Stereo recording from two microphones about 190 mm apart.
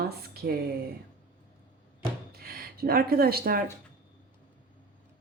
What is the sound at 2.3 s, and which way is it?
Speech, 50° right (ahead or behind).